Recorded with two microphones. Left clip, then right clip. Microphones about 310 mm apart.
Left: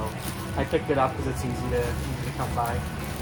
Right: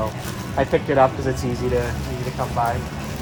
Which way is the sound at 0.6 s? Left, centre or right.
Right.